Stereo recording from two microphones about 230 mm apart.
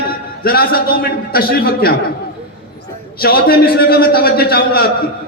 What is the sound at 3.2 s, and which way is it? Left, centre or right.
A man's voice, left.